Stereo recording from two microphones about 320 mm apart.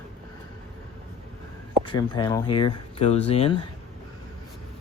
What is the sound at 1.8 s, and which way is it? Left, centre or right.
Speech, centre.